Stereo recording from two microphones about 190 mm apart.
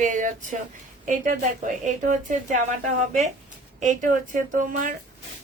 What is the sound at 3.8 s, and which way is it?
Speech, 40° right (ahead or behind).